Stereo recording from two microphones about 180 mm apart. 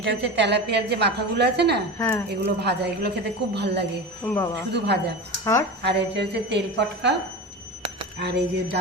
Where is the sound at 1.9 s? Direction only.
15° left (ahead or behind).